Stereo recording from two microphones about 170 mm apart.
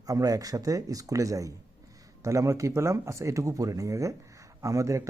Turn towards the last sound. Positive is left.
turn(degrees=-20)  # may be behind; listen again after turning